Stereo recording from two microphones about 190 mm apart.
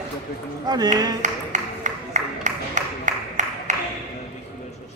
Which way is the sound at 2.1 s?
40° right (ahead or behind).